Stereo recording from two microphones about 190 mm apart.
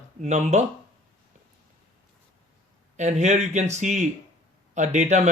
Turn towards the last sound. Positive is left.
turn(degrees=-40)  # may be behind; listen again after turning